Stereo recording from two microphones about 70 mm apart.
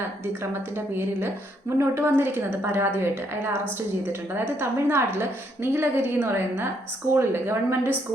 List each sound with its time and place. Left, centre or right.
1.8 s a woman's voice: right
4.6 s a woman's voice: right